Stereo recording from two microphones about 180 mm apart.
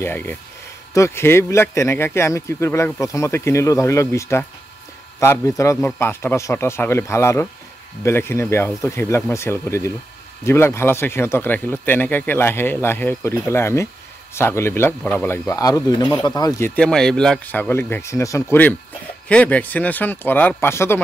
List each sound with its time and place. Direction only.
0.0 s speech: 10° left (ahead or behind)